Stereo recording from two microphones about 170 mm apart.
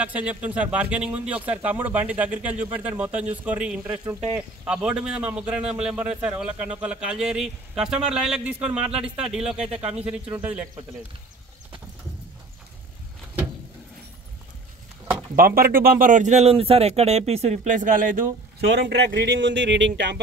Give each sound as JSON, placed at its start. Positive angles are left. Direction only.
{"t": 0.0, "sound": "a man's voice", "side_deg": -10}
{"t": 15.3, "sound": "a man's voice", "side_deg": -60}
{"t": 18.7, "sound": "speech", "side_deg": -90}